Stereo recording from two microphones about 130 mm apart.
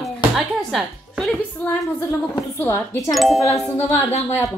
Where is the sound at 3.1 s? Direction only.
Centre (ahead or behind).